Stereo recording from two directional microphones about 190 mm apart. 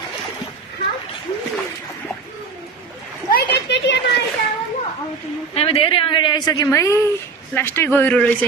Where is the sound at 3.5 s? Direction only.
65° left (ahead or behind).